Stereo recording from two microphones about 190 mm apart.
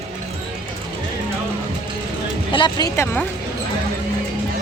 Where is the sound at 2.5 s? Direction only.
25° left (ahead or behind).